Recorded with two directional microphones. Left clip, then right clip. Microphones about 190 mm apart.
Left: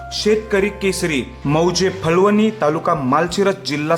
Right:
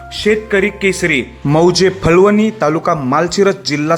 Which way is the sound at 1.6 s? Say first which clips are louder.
Right 6 dB; 20° right (ahead or behind).